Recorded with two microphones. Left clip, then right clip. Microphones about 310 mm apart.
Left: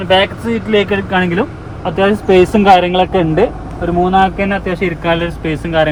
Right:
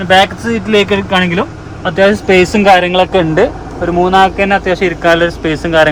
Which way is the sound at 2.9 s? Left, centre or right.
Right.